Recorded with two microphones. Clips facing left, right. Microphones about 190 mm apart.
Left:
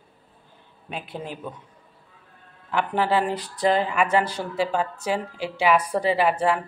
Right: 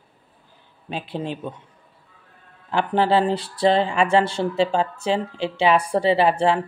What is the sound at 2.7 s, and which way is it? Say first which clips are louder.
Speech: right 3 dB; 30° right (ahead or behind).